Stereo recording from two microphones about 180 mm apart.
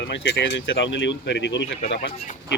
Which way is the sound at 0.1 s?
75° left (ahead or behind).